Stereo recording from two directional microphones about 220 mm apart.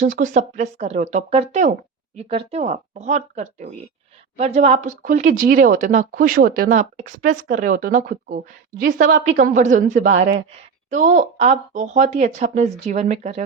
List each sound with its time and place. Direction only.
0.0 s speech: 35° right (ahead or behind)